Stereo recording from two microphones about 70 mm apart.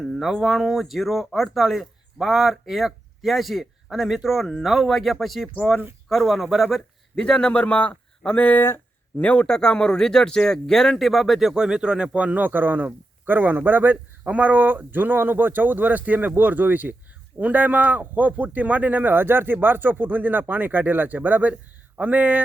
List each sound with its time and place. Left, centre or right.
0.3 s speech: centre
7.2 s speech: centre
8.6 s a sound: left
9.2 s speech: centre; by 22.4 s right